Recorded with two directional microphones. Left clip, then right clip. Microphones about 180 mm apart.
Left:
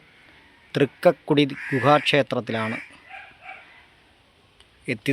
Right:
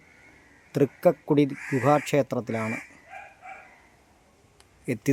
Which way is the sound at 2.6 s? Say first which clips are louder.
Left 3 dB; 15° left (ahead or behind).